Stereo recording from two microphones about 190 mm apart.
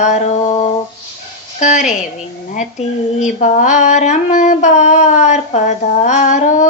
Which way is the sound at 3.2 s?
40° left (ahead or behind).